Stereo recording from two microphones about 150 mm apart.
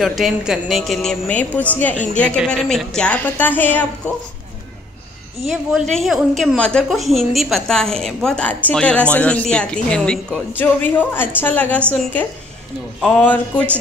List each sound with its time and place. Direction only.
0.0 s a woman's voice: centre (ahead or behind)
5.5 s a woman's voice: centre (ahead or behind)